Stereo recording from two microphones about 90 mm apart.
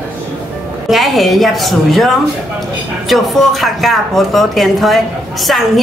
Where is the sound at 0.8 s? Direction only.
Centre (ahead or behind).